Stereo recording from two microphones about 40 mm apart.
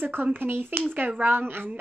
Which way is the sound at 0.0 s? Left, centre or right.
Right.